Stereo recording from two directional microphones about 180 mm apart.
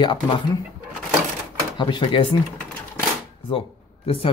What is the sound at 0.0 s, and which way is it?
Speech, 25° left (ahead or behind).